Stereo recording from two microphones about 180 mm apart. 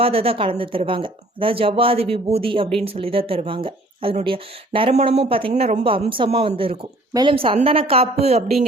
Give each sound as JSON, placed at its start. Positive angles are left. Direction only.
{"t": 0.0, "sound": "speech", "side_deg": -30}